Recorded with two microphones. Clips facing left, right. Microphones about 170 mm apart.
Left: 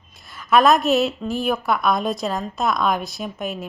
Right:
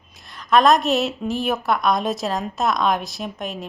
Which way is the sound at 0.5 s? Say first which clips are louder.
Even; centre (ahead or behind).